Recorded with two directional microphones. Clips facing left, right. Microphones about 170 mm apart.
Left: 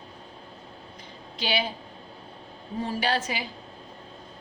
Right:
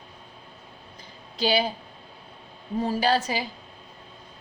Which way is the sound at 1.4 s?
35° right (ahead or behind).